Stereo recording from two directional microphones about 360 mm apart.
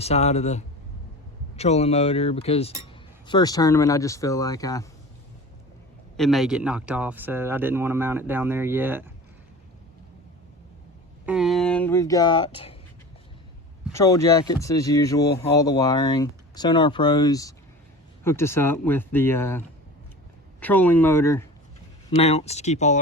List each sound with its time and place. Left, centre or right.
0.0 s speech: centre
6.1 s speech: centre
11.3 s speech: centre
13.9 s speech: centre
22.2 s speech: centre